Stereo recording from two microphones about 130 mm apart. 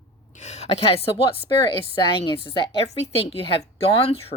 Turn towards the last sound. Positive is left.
turn(degrees=45)  # may be behind; listen again after turning